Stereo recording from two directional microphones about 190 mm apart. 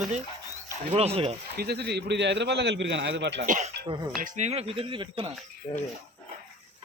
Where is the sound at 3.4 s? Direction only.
40° right (ahead or behind).